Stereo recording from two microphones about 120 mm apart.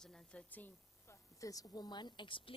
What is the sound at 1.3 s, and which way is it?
Speech, 30° left (ahead or behind).